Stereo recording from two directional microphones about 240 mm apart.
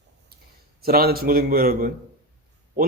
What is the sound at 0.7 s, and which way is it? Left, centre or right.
Speech, right.